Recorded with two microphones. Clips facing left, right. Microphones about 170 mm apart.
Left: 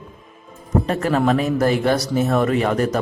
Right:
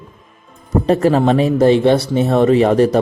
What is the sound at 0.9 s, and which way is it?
A man's voice, 35° right (ahead or behind).